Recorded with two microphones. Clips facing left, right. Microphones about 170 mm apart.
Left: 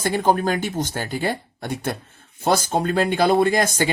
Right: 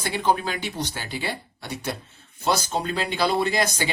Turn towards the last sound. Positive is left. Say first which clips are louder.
# left 5 dB
turn(degrees=50)  # may be behind; listen again after turning